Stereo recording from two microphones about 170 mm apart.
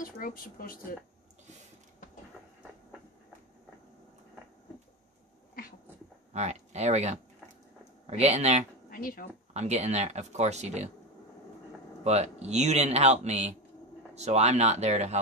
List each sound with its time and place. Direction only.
0.0 s speech: 55° left (ahead or behind)
6.3 s speech: 40° right (ahead or behind)
8.9 s speech: 55° left (ahead or behind)
9.5 s speech: 40° right (ahead or behind)
12.0 s speech: 40° right (ahead or behind)